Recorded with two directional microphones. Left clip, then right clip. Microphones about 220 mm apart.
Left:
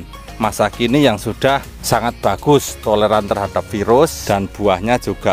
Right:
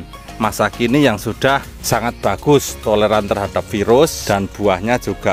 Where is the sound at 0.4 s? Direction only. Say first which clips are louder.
Even; centre (ahead or behind).